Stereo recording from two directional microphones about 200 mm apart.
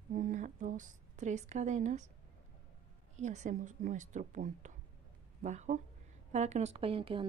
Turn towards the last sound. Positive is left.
turn(degrees=-25)  # may be behind; listen again after turning